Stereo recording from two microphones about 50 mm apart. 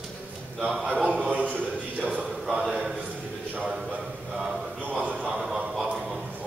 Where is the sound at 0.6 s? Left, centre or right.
Centre.